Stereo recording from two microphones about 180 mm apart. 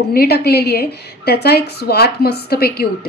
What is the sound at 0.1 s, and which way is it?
A woman's voice, 60° left (ahead or behind).